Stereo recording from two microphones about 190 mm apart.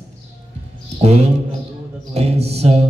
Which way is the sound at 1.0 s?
35° right (ahead or behind).